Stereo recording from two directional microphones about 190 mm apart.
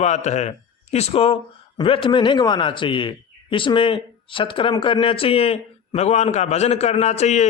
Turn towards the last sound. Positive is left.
turn(degrees=35)  # may be behind; listen again after turning